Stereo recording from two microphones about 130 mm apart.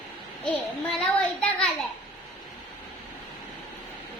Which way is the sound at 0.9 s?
5° left (ahead or behind).